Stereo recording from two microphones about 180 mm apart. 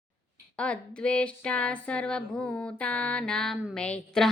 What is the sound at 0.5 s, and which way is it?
Speech, 5° left (ahead or behind).